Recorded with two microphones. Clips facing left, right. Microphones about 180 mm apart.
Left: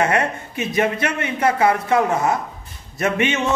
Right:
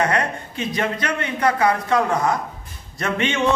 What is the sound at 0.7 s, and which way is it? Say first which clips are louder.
A man's voice: left 4 dB; 25° left (ahead or behind).